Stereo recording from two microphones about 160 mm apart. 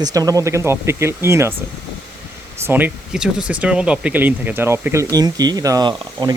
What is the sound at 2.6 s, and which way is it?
Speech, 10° right (ahead or behind).